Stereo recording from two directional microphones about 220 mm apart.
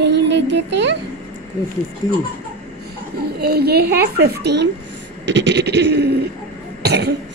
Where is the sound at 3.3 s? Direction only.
45° right (ahead or behind).